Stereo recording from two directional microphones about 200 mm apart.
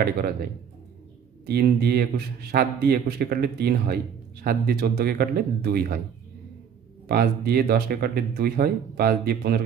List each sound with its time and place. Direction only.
1.4 s a man's voice: 50° right (ahead or behind)
7.1 s a man's voice: 50° right (ahead or behind)